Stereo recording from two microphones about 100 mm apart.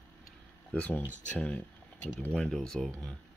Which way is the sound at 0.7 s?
15° left (ahead or behind).